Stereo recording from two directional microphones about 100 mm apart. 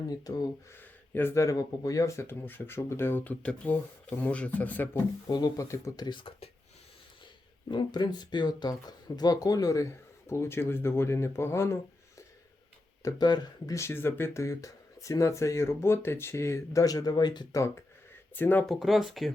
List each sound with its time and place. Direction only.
0.1 s speech: 40° left (ahead or behind)
0.8 s speech: 20° left (ahead or behind)
5.3 s speech: 35° left (ahead or behind)
6.1 s speech: 60° left (ahead or behind)
7.7 s speech: 45° left (ahead or behind); by 12.2 s 25° left (ahead or behind)
13.0 s speech: 40° left (ahead or behind)
13.7 s speech: 25° left (ahead or behind); by 17.6 s 45° left (ahead or behind)
18.3 s speech: 20° left (ahead or behind)
18.6 s speech: centre (ahead or behind)